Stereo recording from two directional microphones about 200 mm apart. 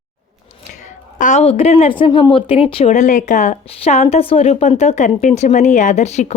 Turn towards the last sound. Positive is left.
turn(degrees=35)  # may be behind; listen again after turning